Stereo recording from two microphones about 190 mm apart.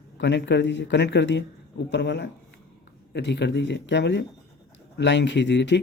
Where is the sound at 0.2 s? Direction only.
65° left (ahead or behind).